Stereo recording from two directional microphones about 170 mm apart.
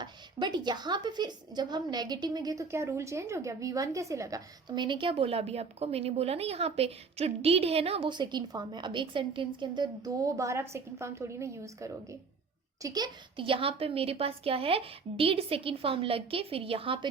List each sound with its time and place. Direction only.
0.0 s a woman's voice: 25° right (ahead or behind)